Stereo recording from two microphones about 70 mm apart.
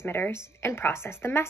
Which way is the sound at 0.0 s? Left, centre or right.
Left.